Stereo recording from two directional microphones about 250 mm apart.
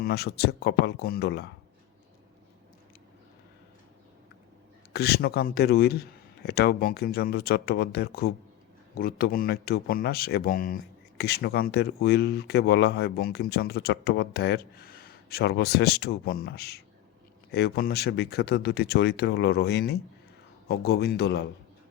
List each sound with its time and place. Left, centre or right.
0.0 s speech: left
4.9 s speech: left